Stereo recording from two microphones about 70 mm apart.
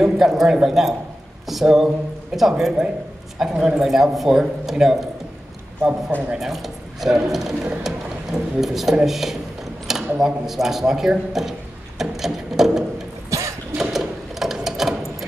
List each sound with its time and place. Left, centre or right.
0.0 s speech: centre
6.3 s speech: centre
12.0 s a sound: centre
13.3 s cough: right
13.7 s sewing machine: centre